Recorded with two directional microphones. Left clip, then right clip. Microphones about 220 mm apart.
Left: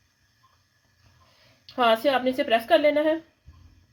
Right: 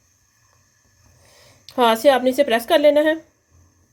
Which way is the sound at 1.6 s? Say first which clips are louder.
Right 6 dB; 40° right (ahead or behind).